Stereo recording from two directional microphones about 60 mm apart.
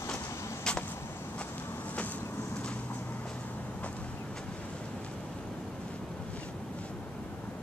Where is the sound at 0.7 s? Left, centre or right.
Centre.